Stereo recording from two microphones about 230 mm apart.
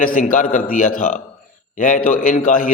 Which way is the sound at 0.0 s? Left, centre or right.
Left.